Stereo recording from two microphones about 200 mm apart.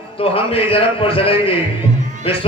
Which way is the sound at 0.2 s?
25° left (ahead or behind).